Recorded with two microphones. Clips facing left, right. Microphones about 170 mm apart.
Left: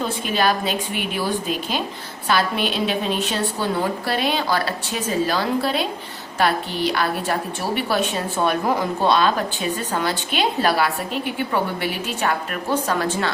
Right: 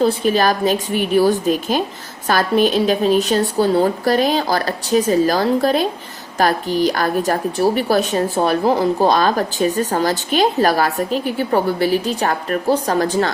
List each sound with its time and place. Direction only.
0.0 s speech: 40° right (ahead or behind)